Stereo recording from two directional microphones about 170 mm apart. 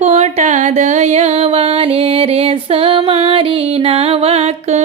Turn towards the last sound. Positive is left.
turn(degrees=-40)  # may be behind; listen again after turning